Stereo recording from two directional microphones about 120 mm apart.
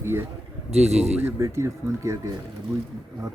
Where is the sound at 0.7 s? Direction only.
60° right (ahead or behind).